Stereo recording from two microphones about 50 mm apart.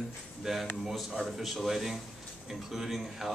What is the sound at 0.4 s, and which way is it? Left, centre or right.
A man's voice, centre.